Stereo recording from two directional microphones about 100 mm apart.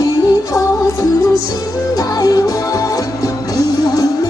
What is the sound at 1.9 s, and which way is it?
Music, 40° left (ahead or behind).